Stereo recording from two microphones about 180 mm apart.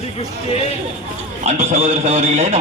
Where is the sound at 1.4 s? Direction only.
40° right (ahead or behind).